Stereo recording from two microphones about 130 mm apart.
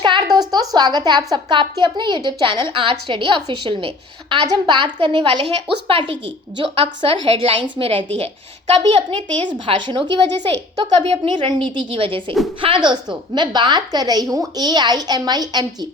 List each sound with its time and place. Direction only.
0.0 s a woman's voice: 35° right (ahead or behind)